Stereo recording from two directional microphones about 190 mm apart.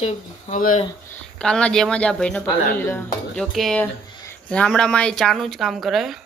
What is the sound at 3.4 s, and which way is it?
Speech, centre (ahead or behind).